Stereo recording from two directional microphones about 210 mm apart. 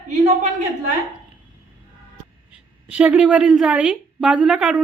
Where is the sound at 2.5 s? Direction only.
5° right (ahead or behind).